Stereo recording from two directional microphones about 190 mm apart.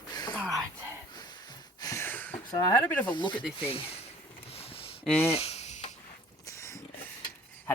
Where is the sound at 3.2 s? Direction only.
25° left (ahead or behind).